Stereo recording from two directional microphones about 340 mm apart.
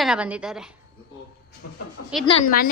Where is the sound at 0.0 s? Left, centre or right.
Centre.